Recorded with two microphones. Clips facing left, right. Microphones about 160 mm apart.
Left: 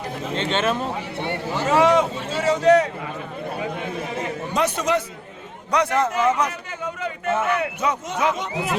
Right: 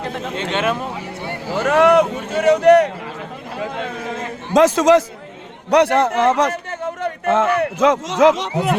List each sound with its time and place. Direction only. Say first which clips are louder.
0.3 s speech: right 1 dB; 15° right (ahead or behind)
1.5 s speech: right 4 dB; 70° right (ahead or behind)
3.6 s speech: right 5 dB; 90° right
5.7 s speech: right 6 dB; 70° right (ahead or behind)
7.0 s a sound: right 6 dB; 90° right
7.8 s speech: right 9 dB; 90° right